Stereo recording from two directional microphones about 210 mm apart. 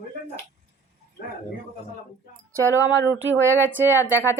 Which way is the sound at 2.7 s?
15° left (ahead or behind).